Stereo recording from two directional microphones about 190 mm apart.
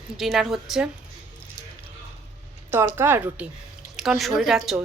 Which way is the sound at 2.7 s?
10° right (ahead or behind).